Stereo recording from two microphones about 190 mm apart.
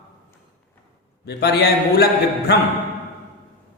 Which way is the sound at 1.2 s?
60° left (ahead or behind).